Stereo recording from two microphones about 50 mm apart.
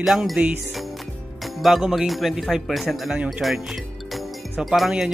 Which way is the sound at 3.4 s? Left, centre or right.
Centre.